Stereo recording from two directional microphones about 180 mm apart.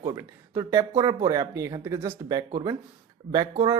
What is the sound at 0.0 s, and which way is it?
Speech, 15° right (ahead or behind).